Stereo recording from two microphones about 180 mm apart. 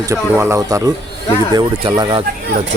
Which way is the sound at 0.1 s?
15° right (ahead or behind).